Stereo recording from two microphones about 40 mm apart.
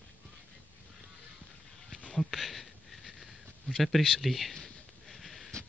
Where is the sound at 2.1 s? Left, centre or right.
Centre.